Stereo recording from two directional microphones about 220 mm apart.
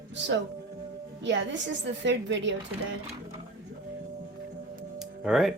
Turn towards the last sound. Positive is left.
turn(degrees=0)  # may be behind; listen again after turning